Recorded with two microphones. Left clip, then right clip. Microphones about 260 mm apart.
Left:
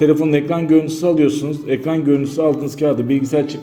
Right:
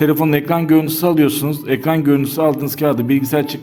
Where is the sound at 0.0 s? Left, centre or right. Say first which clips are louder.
Left 1 dB; right.